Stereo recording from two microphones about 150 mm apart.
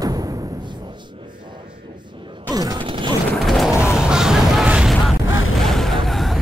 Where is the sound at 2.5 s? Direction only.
25° right (ahead or behind).